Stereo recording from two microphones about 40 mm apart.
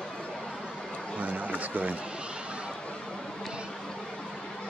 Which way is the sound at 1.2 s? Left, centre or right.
Right.